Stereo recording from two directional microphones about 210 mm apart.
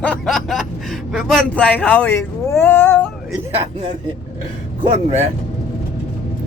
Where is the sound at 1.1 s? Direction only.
5° left (ahead or behind).